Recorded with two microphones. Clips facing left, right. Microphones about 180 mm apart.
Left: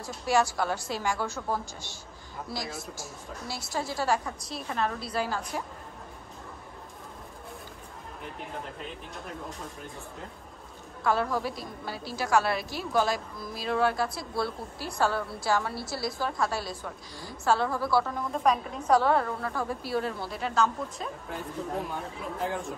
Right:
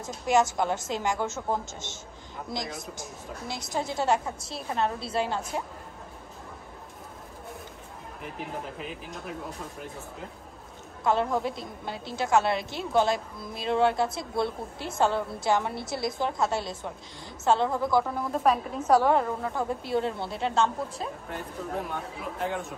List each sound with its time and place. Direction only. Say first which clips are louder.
0.0 s a woman's voice: right 2 dB; 20° right (ahead or behind)
8.2 s speech: right 3 dB; 5° right (ahead or behind)
11.1 s a woman's voice: right 2 dB; 20° right (ahead or behind)
21.9 s speech: even; centre (ahead or behind)